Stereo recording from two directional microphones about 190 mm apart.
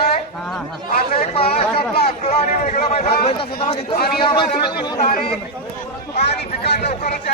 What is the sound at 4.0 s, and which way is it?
A man's voice, 55° left (ahead or behind).